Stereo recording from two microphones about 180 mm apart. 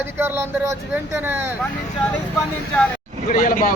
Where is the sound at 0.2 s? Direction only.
15° right (ahead or behind).